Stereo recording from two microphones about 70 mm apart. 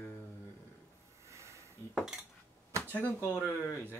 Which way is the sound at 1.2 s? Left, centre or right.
Right.